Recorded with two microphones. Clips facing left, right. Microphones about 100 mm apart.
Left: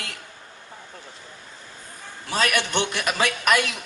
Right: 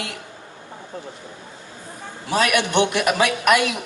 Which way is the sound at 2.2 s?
15° right (ahead or behind).